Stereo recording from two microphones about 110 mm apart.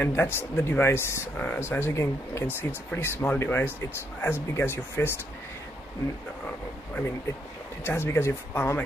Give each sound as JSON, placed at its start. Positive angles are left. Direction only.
{"t": 0.0, "sound": "speech", "side_deg": 20}
{"t": 7.8, "sound": "speech", "side_deg": 20}